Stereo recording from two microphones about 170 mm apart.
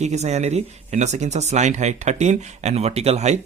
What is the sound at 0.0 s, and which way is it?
Speech, 40° right (ahead or behind).